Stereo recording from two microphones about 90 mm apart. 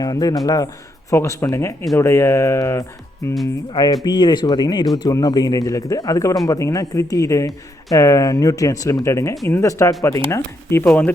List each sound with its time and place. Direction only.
0.0 s speech: 45° left (ahead or behind)
1.1 s speech: 30° left (ahead or behind)
3.7 s speech: 50° left (ahead or behind); by 11.1 s 20° left (ahead or behind)